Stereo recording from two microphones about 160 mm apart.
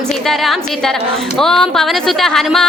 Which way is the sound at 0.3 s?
Centre (ahead or behind).